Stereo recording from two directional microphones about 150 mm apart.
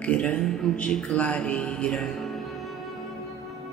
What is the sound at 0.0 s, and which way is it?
Speech, 10° left (ahead or behind).